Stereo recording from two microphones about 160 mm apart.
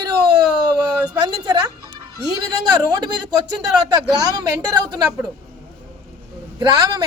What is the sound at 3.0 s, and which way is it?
Speech, 25° right (ahead or behind).